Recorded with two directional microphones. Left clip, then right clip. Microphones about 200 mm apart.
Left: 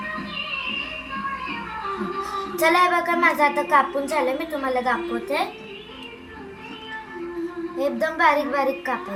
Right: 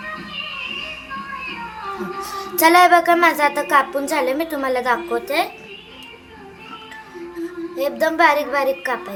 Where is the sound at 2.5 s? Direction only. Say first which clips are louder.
Right 7 dB; 60° right (ahead or behind).